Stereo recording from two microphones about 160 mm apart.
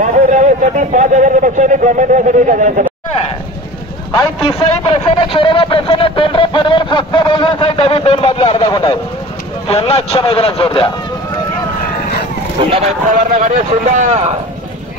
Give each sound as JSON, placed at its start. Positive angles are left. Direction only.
{"t": 0.0, "sound": "a man's voice", "side_deg": -50}
{"t": 4.4, "sound": "a sound", "side_deg": 35}
{"t": 8.6, "sound": "speech", "side_deg": 25}
{"t": 9.7, "sound": "a man's voice", "side_deg": 40}
{"t": 12.6, "sound": "a man's voice", "side_deg": -35}
{"t": 13.1, "sound": "a man's voice", "side_deg": -55}